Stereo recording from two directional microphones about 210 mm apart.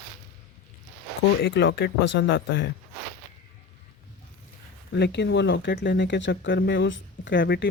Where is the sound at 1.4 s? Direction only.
55° left (ahead or behind).